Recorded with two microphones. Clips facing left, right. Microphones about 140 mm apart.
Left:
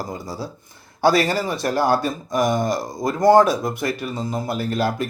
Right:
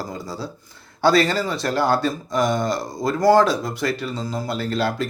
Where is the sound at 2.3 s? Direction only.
50° left (ahead or behind).